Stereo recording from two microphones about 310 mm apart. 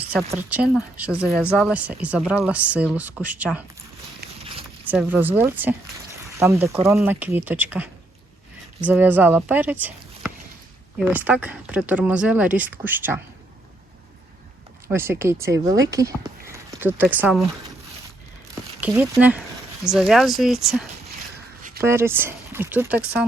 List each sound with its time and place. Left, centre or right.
0.1 s speech: centre
4.2 s a sound: right
4.9 s speech: centre
14.8 s speech: centre
18.8 s speech: centre